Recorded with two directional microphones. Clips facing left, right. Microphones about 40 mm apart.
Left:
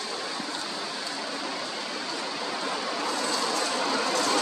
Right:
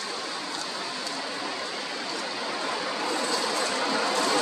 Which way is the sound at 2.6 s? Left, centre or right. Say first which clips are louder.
Right 1 dB; centre.